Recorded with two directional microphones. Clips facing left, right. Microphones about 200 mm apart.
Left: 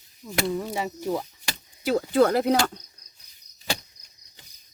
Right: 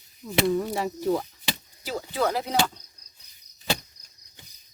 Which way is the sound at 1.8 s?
55° left (ahead or behind).